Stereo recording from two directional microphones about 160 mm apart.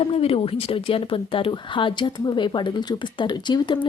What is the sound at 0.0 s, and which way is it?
Speech, 40° left (ahead or behind).